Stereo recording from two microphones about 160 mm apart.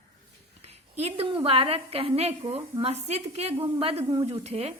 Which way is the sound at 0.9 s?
40° right (ahead or behind).